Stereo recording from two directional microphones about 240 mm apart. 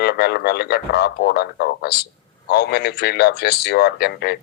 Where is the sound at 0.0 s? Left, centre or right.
Left.